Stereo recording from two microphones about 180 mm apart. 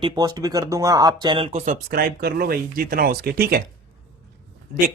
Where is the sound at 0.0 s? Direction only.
20° right (ahead or behind).